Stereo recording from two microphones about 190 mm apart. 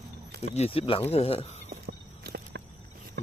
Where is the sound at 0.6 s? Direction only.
30° left (ahead or behind).